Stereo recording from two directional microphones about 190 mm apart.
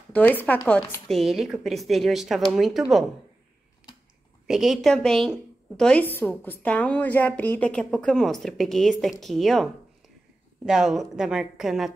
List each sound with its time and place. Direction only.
0.1 s a woman's voice: 10° left (ahead or behind)
4.5 s a woman's voice: centre (ahead or behind)